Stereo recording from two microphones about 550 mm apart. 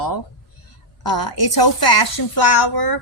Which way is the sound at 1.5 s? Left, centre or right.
Left.